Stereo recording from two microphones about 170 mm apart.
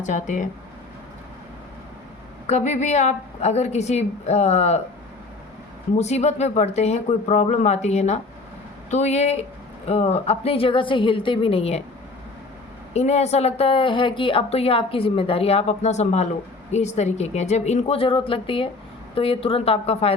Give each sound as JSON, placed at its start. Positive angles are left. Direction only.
{"t": 0.0, "sound": "speech", "side_deg": 45}
{"t": 2.5, "sound": "a woman's voice", "side_deg": 45}
{"t": 6.0, "sound": "a woman's voice", "side_deg": 40}
{"t": 12.9, "sound": "a woman's voice", "side_deg": 40}